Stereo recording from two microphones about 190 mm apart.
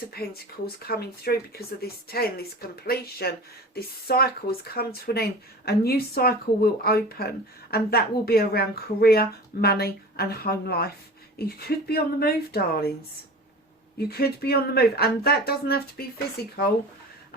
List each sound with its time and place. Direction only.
0.1 s speech: 55° left (ahead or behind)
14.1 s speech: 55° left (ahead or behind)